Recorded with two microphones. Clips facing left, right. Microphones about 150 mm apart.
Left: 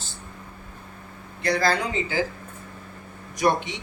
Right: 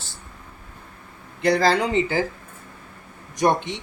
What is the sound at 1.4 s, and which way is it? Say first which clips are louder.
Speech: right 4 dB; 90° right.